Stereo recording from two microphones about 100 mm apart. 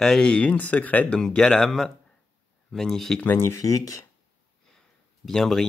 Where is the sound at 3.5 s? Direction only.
35° left (ahead or behind).